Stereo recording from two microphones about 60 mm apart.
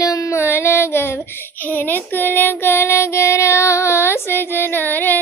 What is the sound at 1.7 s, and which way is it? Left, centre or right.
Child singing, left.